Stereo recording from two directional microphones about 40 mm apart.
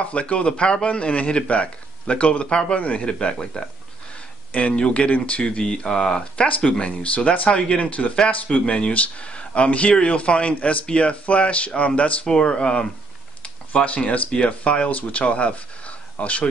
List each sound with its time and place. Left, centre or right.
0.0 s speech: left
3.1 s speech: left
4.5 s speech: left
5.6 s speech: centre
8.6 s speech: left
12.3 s speech: left